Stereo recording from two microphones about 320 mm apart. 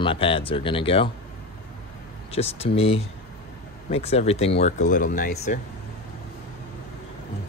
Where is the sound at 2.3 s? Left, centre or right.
Centre.